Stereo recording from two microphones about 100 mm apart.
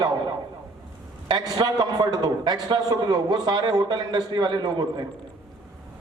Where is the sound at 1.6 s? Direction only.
45° right (ahead or behind).